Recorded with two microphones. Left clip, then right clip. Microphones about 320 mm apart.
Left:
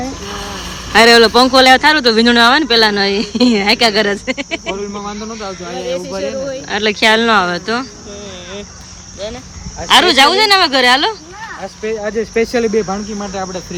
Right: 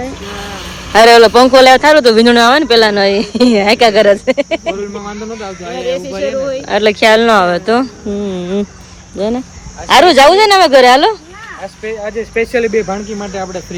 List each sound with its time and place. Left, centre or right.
0.9 s speech: centre
6.7 s speech: centre
9.9 s speech: centre
11.8 s speech: left